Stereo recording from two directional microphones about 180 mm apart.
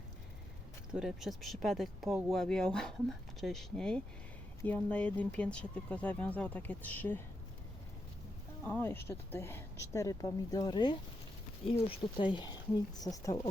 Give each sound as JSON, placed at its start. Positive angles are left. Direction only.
{"t": 0.9, "sound": "speech", "side_deg": 0}
{"t": 8.6, "sound": "speech", "side_deg": 10}